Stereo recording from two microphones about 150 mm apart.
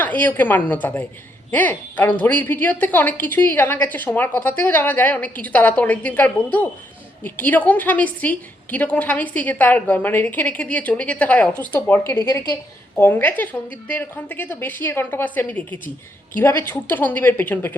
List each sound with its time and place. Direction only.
0.0 s a woman's voice: 10° left (ahead or behind)